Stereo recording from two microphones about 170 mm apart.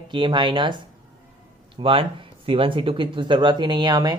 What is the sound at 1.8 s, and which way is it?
Speech, 30° right (ahead or behind).